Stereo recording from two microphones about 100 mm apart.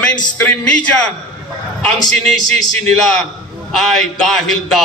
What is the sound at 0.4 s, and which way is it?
Speech, 10° left (ahead or behind).